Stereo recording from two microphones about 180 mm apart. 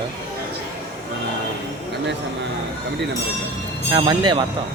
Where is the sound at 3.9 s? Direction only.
25° right (ahead or behind).